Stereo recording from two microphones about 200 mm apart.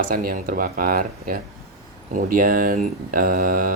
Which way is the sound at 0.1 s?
45° right (ahead or behind).